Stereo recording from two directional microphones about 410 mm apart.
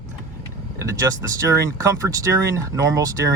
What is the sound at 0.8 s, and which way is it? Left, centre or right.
Speech, centre.